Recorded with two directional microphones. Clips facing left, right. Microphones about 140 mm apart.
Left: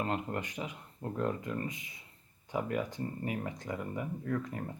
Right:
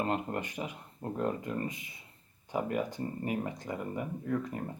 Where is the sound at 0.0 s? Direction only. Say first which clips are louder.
Right 2 dB; 25° right (ahead or behind).